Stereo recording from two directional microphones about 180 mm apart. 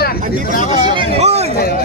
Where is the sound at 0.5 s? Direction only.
45° left (ahead or behind).